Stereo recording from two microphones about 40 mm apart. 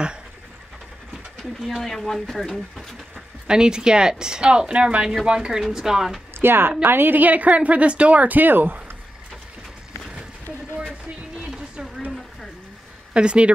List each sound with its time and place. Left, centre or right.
1.4 s speech: centre
3.4 s speech: centre
6.3 s a woman's voice: right
7.2 s speech: right
8.4 s speech: right
11.3 s a sound: right
13.1 s speech: right